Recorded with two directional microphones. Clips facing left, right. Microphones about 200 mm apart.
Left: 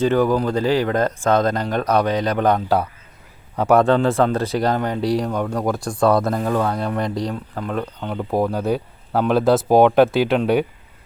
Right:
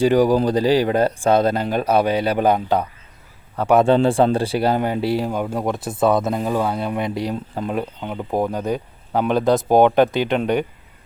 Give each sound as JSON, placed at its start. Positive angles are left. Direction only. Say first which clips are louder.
{"t": 0.0, "sound": "speech", "louder": "right 2 dB", "side_deg": -15}
{"t": 3.5, "sound": "speech", "louder": "left 1 dB", "side_deg": 10}
{"t": 3.9, "sound": "speech", "louder": "right 2 dB", "side_deg": -25}
{"t": 4.5, "sound": "speech", "louder": "right 1 dB", "side_deg": -10}
{"t": 7.3, "sound": "speech", "louder": "right 1 dB", "side_deg": -20}
{"t": 8.1, "sound": "speech", "louder": "left 1 dB", "side_deg": 0}